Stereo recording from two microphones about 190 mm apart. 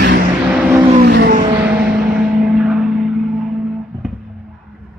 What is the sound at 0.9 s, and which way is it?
Vehicle, 60° right (ahead or behind).